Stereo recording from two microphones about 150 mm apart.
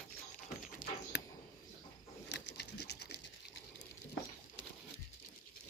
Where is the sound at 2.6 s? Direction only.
90° left.